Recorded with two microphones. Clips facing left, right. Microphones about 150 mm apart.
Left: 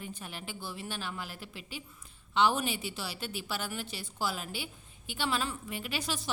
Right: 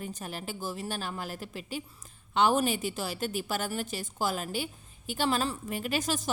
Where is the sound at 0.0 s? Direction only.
40° right (ahead or behind).